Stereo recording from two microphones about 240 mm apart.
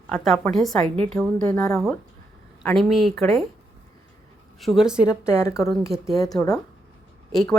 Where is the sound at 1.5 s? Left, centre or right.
Centre.